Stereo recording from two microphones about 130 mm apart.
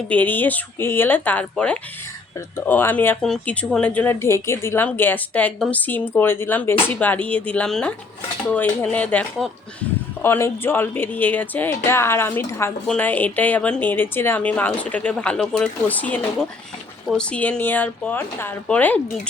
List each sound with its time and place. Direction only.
0.1 s a woman's voice: 10° left (ahead or behind)
3.2 s a woman's voice: 5° left (ahead or behind)
10.2 s a woman's voice: 20° left (ahead or behind)